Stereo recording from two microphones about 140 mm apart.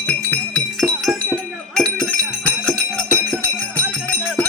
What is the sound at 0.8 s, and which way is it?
Music, 5° left (ahead or behind).